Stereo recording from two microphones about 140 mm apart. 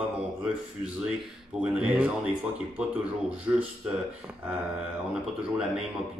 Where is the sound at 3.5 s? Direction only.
15° right (ahead or behind).